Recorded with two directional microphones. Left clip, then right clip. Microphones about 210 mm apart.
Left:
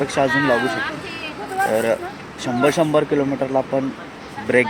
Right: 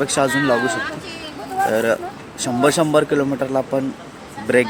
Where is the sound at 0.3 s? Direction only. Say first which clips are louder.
Even; 50° right (ahead or behind).